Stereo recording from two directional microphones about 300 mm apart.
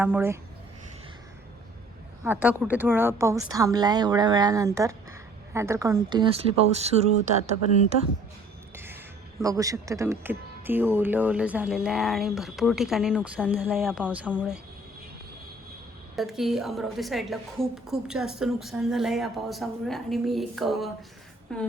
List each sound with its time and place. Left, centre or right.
0.0 s speech: centre
2.2 s speech: centre; by 7.1 s right
8.7 s music: centre
9.4 s speech: centre
16.1 s speech: centre